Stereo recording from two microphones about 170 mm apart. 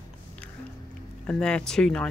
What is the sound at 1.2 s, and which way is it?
Speech, 5° left (ahead or behind).